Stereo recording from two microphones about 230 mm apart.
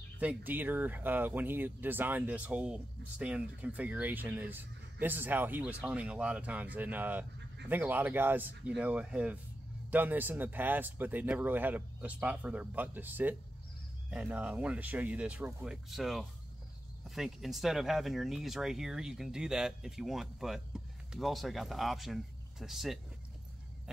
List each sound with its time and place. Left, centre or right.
0.2 s speech: centre